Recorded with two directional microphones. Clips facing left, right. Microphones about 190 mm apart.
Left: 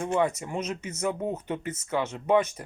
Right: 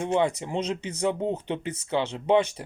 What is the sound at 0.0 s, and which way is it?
Speech, 25° right (ahead or behind).